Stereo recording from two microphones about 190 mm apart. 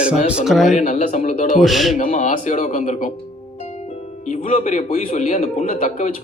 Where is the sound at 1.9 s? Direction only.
45° left (ahead or behind).